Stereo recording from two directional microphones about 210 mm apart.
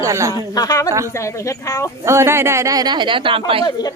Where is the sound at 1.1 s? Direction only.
15° left (ahead or behind).